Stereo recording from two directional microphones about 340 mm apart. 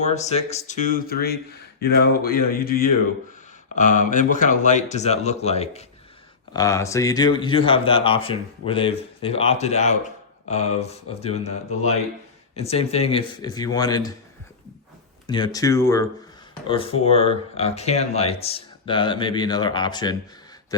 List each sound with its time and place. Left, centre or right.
0.0 s speech: centre
15.3 s speech: centre